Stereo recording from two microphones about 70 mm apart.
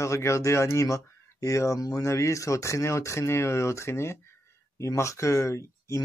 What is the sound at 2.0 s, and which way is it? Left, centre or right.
Speech, left.